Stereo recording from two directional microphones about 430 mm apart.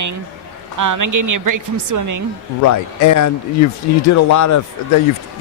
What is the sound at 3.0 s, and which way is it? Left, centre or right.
Speech, left.